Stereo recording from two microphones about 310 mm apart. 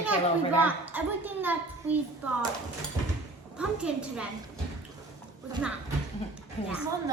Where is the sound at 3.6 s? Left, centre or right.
Centre.